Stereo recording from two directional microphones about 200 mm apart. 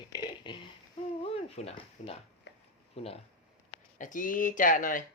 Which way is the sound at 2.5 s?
60° left (ahead or behind).